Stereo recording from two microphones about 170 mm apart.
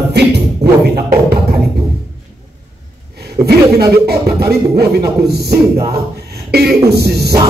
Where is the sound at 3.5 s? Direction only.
70° right (ahead or behind).